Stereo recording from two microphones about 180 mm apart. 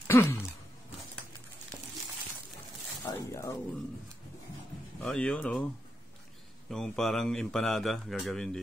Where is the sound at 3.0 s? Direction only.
15° left (ahead or behind).